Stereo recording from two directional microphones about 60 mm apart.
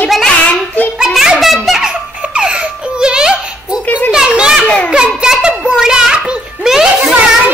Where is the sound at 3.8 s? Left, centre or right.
Left.